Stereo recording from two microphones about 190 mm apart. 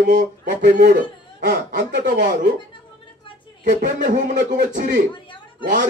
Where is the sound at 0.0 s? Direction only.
40° right (ahead or behind).